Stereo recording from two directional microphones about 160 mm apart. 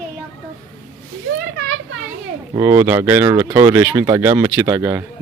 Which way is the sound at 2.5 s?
15° right (ahead or behind).